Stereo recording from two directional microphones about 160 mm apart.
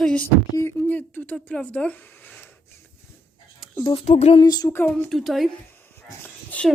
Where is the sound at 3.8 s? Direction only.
30° left (ahead or behind).